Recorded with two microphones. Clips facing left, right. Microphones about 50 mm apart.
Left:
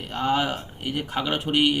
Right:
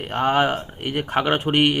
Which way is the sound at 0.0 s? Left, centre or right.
Right.